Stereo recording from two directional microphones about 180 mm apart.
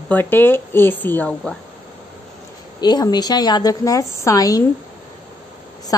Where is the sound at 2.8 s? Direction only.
25° left (ahead or behind).